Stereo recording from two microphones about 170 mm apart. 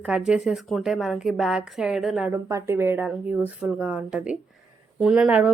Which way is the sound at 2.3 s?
15° right (ahead or behind).